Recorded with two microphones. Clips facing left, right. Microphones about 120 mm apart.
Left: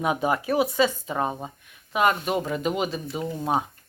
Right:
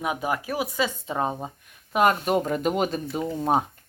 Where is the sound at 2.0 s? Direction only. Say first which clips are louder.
Right 2 dB; 45° right (ahead or behind).